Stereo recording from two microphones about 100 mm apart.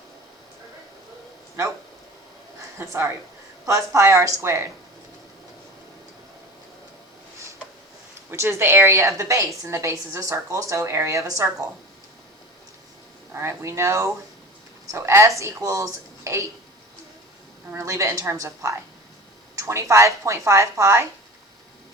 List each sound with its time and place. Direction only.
2.7 s a woman's voice: 30° right (ahead or behind)
8.3 s a woman's voice: 25° right (ahead or behind)
13.3 s a woman's voice: 30° right (ahead or behind)
17.7 s a woman's voice: 30° right (ahead or behind)